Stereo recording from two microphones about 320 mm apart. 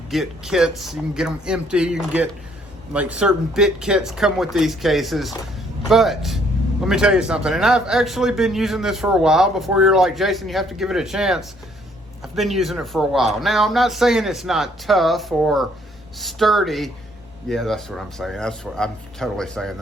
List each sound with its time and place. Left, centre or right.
0.1 s a man's voice: centre